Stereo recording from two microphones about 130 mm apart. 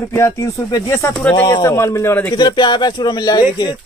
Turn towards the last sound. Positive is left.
turn(degrees=35)  # may be behind; listen again after turning